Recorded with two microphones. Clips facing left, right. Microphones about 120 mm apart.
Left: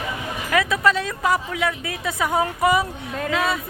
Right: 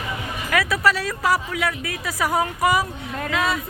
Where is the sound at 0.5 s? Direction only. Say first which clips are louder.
Left 1 dB; 20° left (ahead or behind).